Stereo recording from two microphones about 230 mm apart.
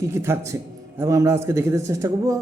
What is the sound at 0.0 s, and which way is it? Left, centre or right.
A man's voice, centre.